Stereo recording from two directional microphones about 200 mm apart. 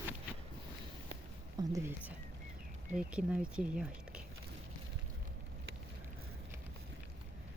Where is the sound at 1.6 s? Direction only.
20° right (ahead or behind).